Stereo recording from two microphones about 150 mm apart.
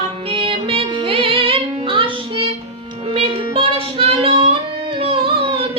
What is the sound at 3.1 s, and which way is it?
Child singing, 40° right (ahead or behind).